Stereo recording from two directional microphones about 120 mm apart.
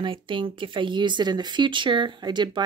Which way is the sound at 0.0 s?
45° right (ahead or behind).